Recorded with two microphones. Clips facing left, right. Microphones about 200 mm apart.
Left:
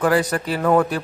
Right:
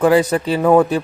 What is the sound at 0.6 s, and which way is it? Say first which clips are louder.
Speech: right 5 dB; 15° right (ahead or behind).